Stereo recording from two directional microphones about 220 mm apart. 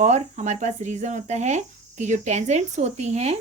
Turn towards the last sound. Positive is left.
turn(degrees=-30)  # may be behind; listen again after turning